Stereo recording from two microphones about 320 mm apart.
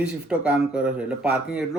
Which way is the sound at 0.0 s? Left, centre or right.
Centre.